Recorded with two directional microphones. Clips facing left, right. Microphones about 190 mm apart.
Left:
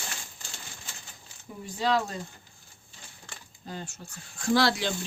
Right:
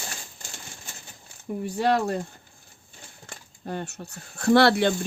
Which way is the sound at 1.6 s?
60° right (ahead or behind).